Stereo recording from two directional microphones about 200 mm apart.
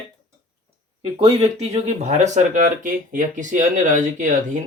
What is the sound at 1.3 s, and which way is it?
Speech, 30° right (ahead or behind).